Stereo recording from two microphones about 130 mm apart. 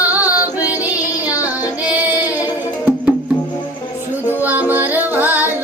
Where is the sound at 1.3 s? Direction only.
10° right (ahead or behind).